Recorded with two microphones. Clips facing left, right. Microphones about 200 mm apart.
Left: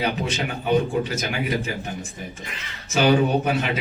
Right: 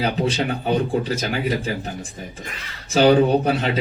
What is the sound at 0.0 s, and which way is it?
A man's voice, 30° right (ahead or behind).